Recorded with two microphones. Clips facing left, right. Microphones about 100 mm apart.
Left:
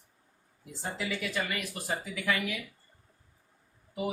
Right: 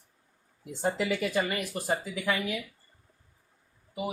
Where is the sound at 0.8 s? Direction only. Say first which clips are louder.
Right 7 dB; 55° right (ahead or behind).